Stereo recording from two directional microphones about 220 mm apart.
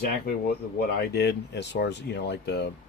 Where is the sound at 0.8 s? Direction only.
45° left (ahead or behind).